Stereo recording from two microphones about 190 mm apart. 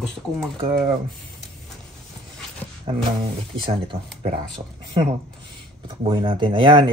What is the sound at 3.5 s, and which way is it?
Speech, 25° right (ahead or behind).